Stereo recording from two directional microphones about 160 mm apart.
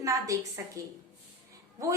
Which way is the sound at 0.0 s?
20° right (ahead or behind).